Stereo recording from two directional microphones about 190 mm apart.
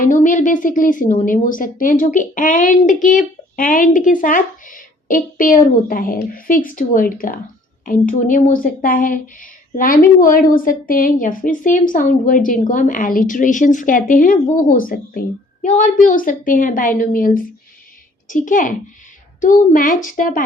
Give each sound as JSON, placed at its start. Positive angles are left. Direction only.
{"t": 0.0, "sound": "speech", "side_deg": 45}